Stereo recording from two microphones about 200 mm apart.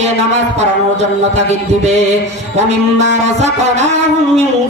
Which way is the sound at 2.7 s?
35° right (ahead or behind).